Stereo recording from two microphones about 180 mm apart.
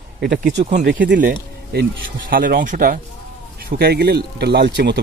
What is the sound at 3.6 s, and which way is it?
Speech, 60° right (ahead or behind).